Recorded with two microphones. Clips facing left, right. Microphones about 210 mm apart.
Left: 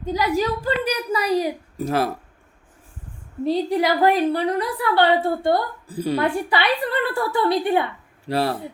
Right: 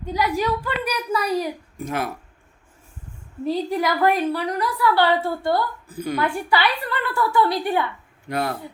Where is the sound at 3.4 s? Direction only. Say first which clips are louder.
Left 3 dB; 25° left (ahead or behind).